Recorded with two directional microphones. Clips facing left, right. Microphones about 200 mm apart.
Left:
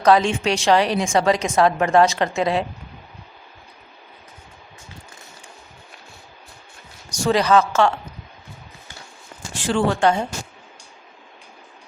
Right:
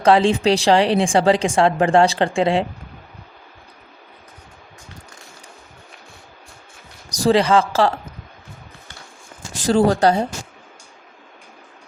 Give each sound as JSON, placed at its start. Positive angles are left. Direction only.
{"t": 0.0, "sound": "a woman's voice", "side_deg": -30}
{"t": 7.1, "sound": "a woman's voice", "side_deg": -35}
{"t": 9.6, "sound": "a woman's voice", "side_deg": -40}